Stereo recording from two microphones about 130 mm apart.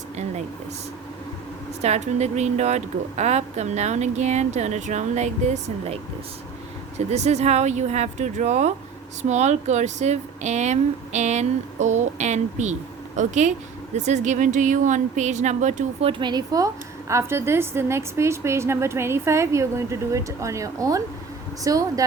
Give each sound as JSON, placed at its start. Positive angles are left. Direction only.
{"t": 1.8, "sound": "speech", "side_deg": -60}
{"t": 7.1, "sound": "speech", "side_deg": -60}